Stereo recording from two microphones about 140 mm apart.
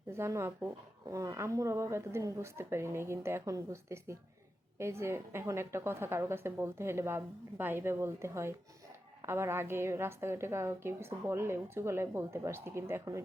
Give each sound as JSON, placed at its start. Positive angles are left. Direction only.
{"t": 0.1, "sound": "a woman's voice", "side_deg": -20}